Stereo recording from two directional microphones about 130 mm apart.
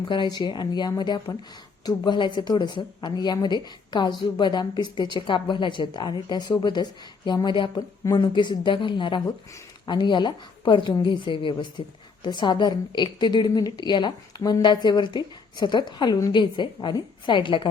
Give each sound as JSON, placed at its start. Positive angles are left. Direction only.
{"t": 0.1, "sound": "a woman's voice", "side_deg": 35}